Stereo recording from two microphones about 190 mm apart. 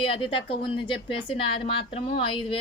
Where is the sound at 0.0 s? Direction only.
30° left (ahead or behind).